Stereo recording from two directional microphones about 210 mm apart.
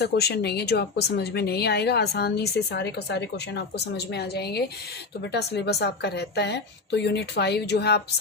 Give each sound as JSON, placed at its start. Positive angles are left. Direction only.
{"t": 0.0, "sound": "speech", "side_deg": 50}